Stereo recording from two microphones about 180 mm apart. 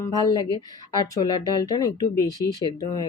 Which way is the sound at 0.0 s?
20° left (ahead or behind).